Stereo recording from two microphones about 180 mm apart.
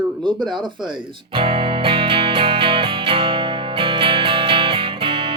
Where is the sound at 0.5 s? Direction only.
25° right (ahead or behind).